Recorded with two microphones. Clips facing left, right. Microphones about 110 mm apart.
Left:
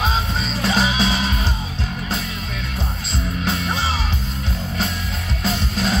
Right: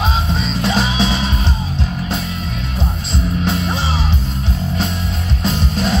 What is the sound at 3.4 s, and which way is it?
Music, 35° right (ahead or behind).